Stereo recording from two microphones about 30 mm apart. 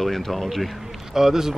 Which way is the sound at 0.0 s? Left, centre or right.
Centre.